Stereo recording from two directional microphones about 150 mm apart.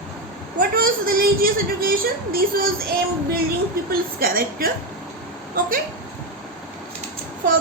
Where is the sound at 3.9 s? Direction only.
75° right (ahead or behind).